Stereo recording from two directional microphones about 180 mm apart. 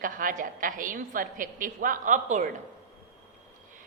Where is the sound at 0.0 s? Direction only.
50° right (ahead or behind).